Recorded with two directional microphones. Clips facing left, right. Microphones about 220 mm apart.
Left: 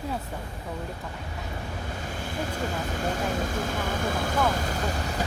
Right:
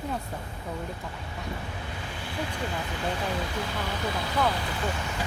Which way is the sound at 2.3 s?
45° left (ahead or behind).